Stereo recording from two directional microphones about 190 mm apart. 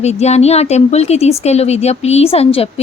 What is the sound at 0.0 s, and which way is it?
Speech, 35° left (ahead or behind).